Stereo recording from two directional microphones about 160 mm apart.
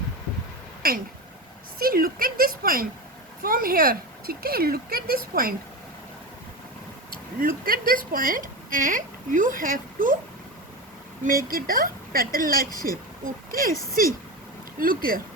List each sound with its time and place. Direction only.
0.8 s a sound: 65° right (ahead or behind)
1.8 s a woman's voice: 65° right (ahead or behind)
7.4 s a woman's voice: 65° right (ahead or behind)
11.3 s a woman's voice: 65° right (ahead or behind)